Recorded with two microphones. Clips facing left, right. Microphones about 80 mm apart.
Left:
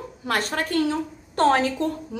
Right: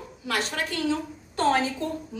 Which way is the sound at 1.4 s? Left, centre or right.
Left.